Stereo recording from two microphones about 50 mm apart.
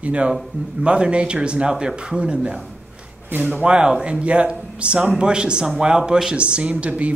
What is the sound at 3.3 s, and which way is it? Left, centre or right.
Speech, right.